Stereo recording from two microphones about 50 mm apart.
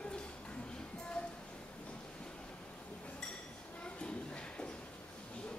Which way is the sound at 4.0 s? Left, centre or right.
Left.